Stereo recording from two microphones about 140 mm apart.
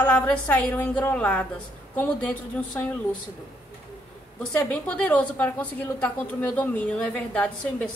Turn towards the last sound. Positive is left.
turn(degrees=10)  # may be behind; listen again after turning